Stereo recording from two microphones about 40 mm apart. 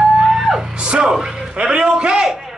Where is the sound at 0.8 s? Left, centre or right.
Right.